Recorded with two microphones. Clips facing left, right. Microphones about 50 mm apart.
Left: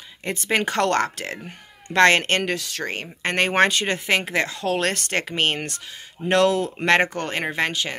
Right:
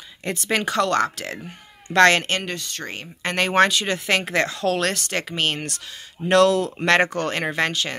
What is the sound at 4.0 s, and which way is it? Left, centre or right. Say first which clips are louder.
Speech: right 1 dB; centre.